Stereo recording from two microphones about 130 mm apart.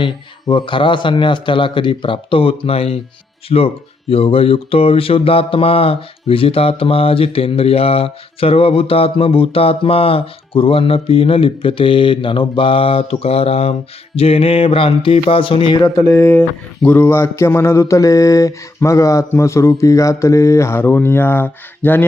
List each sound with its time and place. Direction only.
0.0 s a man's voice: 40° left (ahead or behind)
3.5 s mantra: 50° left (ahead or behind)
15.8 s speech: 25° left (ahead or behind)